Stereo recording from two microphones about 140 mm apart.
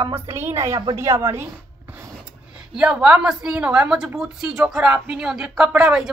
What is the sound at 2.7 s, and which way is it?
A woman's voice, 5° right (ahead or behind).